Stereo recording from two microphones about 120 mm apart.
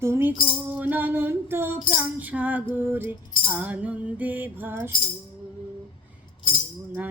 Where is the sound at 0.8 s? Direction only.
15° right (ahead or behind).